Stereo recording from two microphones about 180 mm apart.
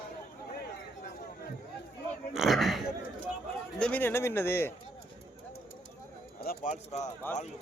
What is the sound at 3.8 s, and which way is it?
Speech, 10° left (ahead or behind).